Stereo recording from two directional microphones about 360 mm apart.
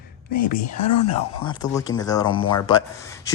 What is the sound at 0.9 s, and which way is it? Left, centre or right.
Speech, left.